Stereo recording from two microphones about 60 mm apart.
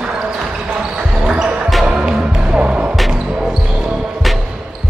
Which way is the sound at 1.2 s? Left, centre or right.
Centre.